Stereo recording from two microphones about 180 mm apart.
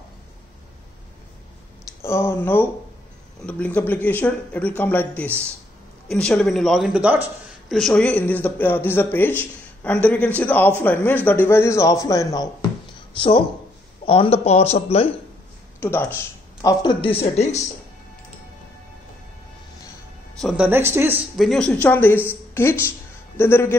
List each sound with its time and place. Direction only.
2.0 s speech: 15° left (ahead or behind); by 7.2 s 5° right (ahead or behind)
7.7 s speech: 5° left (ahead or behind); by 15.0 s 35° left (ahead or behind)
15.8 s speech: 10° left (ahead or behind)
16.6 s speech: 25° left (ahead or behind)
20.3 s speech: 5° right (ahead or behind)
21.4 s speech: centre (ahead or behind)